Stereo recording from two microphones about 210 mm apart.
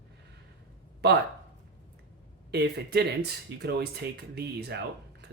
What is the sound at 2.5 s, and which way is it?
Speech, 50° right (ahead or behind).